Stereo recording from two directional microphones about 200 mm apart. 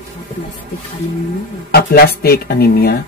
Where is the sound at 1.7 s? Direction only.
50° left (ahead or behind).